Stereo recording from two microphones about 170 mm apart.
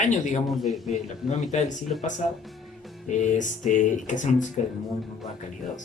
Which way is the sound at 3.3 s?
45° left (ahead or behind).